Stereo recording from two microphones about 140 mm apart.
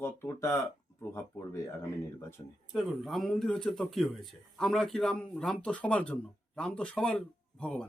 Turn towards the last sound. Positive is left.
turn(degrees=5)  # may be behind; listen again after turning